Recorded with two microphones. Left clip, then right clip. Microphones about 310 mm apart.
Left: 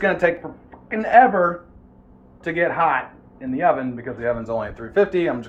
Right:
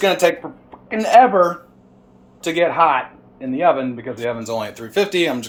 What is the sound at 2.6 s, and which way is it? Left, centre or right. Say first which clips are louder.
Speech: right 4 dB; centre.